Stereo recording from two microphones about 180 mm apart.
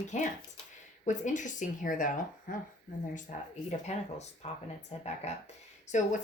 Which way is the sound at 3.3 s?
45° left (ahead or behind).